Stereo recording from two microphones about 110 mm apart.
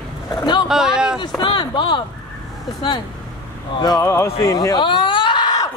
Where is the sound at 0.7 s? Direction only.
5° right (ahead or behind).